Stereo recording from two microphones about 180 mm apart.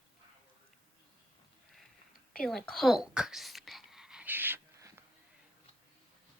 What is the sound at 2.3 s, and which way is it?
Whispering, 5° left (ahead or behind).